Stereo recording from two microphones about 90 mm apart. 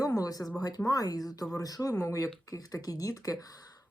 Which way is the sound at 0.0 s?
40° left (ahead or behind).